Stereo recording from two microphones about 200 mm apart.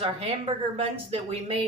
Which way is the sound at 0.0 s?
25° right (ahead or behind).